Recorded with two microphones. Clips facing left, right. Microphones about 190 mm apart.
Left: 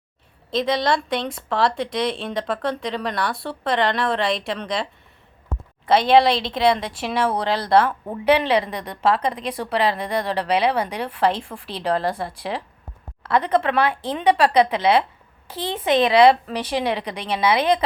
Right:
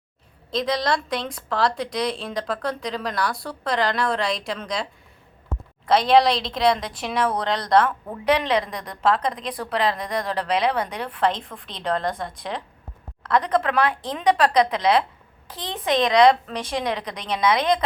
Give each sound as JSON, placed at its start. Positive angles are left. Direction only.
{"t": 0.5, "sound": "a woman's voice", "side_deg": 0}
{"t": 7.9, "sound": "speech", "side_deg": 20}
{"t": 8.2, "sound": "a woman's voice", "side_deg": 5}